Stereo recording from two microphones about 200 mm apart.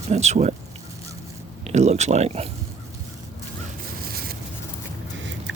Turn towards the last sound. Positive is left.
turn(degrees=-65)  # may be behind; listen again after turning